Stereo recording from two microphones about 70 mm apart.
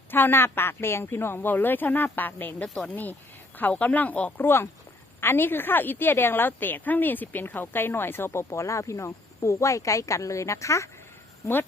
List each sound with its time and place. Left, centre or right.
0.1 s a woman's voice: left
4.4 s a woman's voice: left